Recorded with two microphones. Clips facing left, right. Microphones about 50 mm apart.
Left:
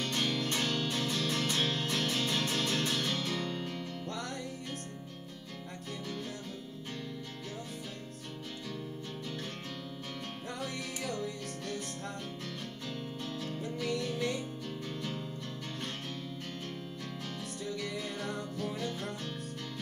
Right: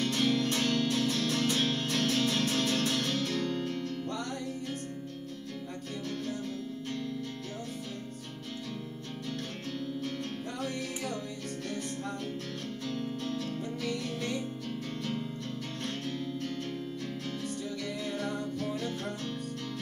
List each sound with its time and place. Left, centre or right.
0.0 s music: centre
12.8 s music: centre
17.9 s music: centre